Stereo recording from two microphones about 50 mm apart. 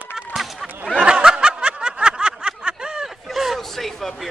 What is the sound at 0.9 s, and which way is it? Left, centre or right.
Snicker, right.